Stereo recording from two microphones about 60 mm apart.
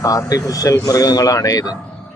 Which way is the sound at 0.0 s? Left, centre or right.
Left.